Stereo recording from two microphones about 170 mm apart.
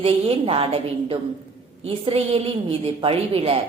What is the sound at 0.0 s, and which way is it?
A woman's voice, 35° right (ahead or behind).